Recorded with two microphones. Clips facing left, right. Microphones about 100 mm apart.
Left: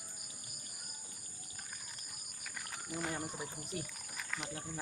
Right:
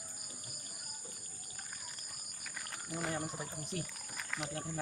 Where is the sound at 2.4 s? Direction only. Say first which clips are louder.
Even; centre (ahead or behind).